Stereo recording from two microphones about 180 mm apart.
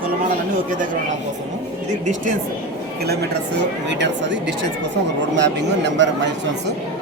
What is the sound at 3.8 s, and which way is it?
Speech, 80° right.